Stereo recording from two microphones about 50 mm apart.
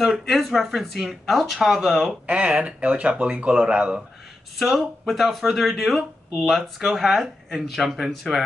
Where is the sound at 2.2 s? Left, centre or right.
Right.